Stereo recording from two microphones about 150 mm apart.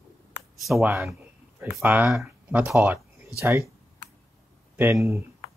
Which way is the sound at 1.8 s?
15° right (ahead or behind).